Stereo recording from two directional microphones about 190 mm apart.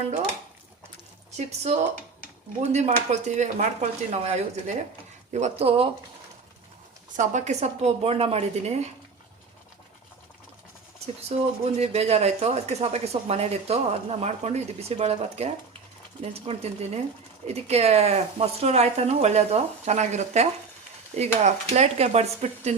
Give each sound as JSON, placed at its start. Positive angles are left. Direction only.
{"t": 1.4, "sound": "speech", "side_deg": -35}
{"t": 7.2, "sound": "speech", "side_deg": -40}
{"t": 11.0, "sound": "speech", "side_deg": -35}